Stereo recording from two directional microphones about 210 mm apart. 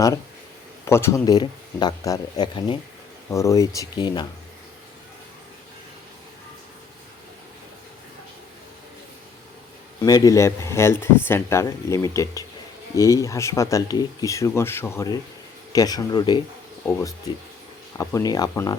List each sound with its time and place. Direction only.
0.9 s speech: 10° left (ahead or behind)
10.0 s speech: 15° left (ahead or behind)